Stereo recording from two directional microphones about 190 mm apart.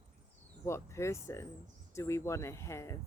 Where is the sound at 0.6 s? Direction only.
15° left (ahead or behind).